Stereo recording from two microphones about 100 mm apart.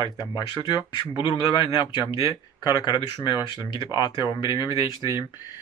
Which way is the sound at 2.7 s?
50° left (ahead or behind).